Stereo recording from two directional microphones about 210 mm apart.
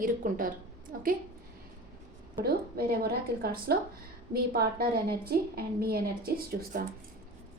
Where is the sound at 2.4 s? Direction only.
45° right (ahead or behind).